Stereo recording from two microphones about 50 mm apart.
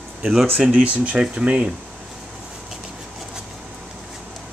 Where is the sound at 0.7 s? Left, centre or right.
Right.